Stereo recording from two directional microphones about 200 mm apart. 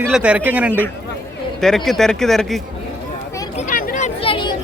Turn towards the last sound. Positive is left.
turn(degrees=25)  # may be behind; listen again after turning